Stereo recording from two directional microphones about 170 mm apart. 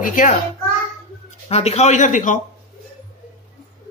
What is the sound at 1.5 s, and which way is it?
Speech, 40° left (ahead or behind).